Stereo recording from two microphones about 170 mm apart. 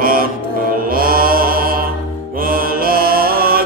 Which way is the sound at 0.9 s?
55° right (ahead or behind).